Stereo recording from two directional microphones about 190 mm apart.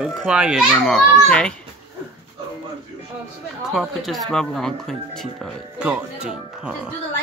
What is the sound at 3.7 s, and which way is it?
Speech, centre (ahead or behind).